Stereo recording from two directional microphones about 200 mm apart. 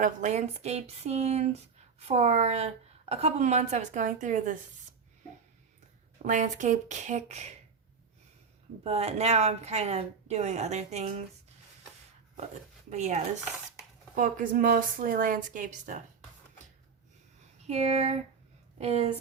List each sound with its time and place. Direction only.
0.0 s a woman's voice: 35° right (ahead or behind)
6.2 s a woman's voice: 40° right (ahead or behind)
8.8 s a woman's voice: 30° right (ahead or behind)
12.9 s a woman's voice: 35° right (ahead or behind)
17.6 s a woman's voice: 35° right (ahead or behind)